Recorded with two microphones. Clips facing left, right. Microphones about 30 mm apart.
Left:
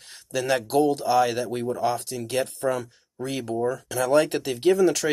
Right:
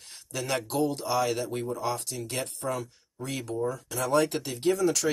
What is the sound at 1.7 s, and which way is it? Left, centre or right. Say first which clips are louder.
Speech: left 6 dB; left.